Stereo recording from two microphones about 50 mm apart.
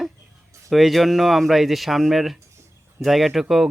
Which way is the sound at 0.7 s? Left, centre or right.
Centre.